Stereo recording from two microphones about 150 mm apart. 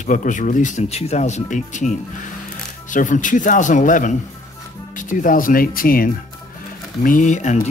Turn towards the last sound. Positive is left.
turn(degrees=50)  # may be behind; listen again after turning